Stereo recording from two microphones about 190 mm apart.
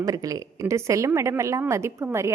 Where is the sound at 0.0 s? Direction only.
20° right (ahead or behind).